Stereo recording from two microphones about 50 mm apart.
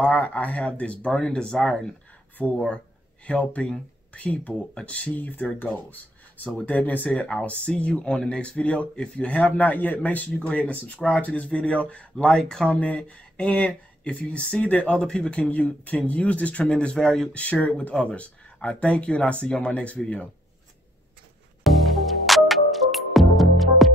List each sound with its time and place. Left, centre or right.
0.0 s speech: left
2.3 s speech: left
7.1 s speech: left
9.3 s speech: left; by 12.6 s centre
12.6 s speech: left
15.0 s speech: centre
16.9 s speech: centre
17.3 s speech: left
21.6 s music: centre